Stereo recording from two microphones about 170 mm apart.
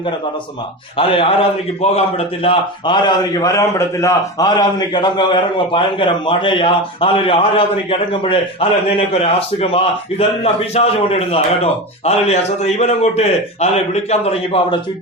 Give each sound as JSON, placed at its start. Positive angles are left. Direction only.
{"t": 0.9, "sound": "a man's voice", "side_deg": 35}